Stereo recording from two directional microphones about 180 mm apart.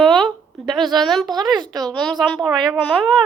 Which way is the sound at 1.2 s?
20° right (ahead or behind).